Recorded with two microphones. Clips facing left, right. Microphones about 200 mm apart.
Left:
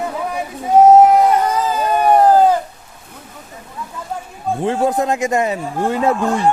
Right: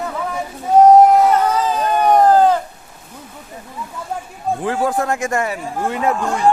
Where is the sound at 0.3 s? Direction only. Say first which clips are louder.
Even; 5° left (ahead or behind).